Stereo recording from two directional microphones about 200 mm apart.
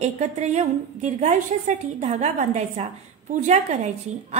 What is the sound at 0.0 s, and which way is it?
A woman's voice, 35° right (ahead or behind).